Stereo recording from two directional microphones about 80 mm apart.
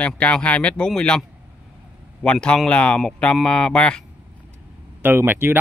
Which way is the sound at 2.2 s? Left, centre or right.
Centre.